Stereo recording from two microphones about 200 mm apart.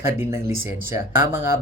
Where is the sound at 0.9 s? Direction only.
10° right (ahead or behind).